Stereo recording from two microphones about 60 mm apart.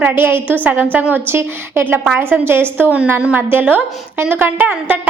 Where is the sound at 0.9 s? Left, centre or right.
Right.